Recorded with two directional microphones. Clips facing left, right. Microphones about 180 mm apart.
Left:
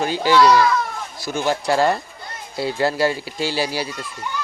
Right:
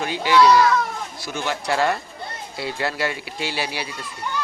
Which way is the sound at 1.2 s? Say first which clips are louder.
Left 6 dB; 40° left (ahead or behind).